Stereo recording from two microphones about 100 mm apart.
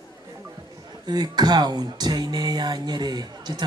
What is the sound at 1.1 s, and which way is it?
Speech, 45° right (ahead or behind).